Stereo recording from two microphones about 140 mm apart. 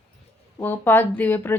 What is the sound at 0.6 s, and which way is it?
Speech, 15° left (ahead or behind).